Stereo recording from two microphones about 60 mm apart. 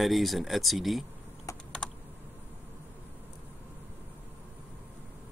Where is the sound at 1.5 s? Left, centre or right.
Left.